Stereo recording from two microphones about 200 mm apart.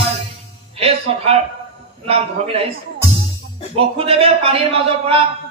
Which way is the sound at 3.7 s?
30° right (ahead or behind).